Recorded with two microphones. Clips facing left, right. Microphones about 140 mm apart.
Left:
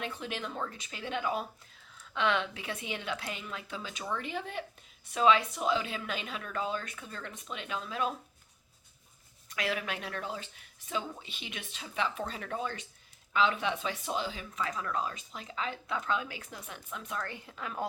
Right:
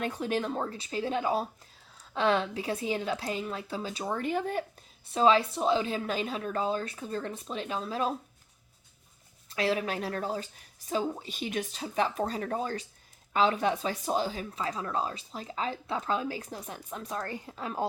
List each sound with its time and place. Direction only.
0.0 s speech: 45° right (ahead or behind)
5.0 s speech: 30° right (ahead or behind)
9.5 s speech: 30° right (ahead or behind)